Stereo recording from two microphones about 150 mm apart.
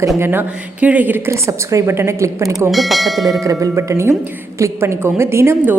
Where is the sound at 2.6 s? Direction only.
Centre (ahead or behind).